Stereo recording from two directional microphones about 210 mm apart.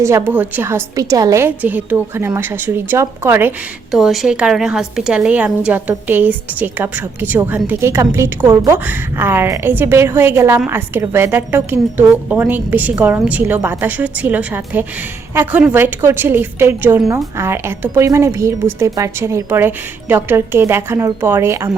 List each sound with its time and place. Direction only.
0.0 s a woman's voice: 10° right (ahead or behind)